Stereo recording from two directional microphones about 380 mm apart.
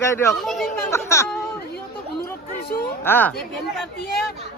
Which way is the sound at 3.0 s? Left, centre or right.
Centre.